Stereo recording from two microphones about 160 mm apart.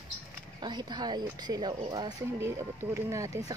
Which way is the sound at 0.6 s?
25° right (ahead or behind).